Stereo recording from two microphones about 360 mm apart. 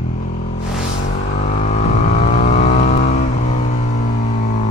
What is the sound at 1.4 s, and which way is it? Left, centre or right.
Vehicle, centre.